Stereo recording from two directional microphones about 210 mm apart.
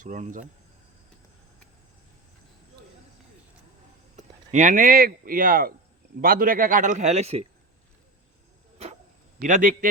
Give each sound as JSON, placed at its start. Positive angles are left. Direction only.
{"t": 0.0, "sound": "speech", "side_deg": -40}
{"t": 4.5, "sound": "speech", "side_deg": -35}
{"t": 9.4, "sound": "speech", "side_deg": -40}